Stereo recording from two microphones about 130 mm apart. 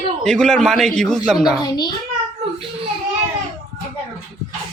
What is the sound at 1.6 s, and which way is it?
Speech, 35° left (ahead or behind).